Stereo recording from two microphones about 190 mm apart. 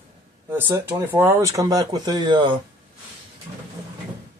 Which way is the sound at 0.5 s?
10° right (ahead or behind).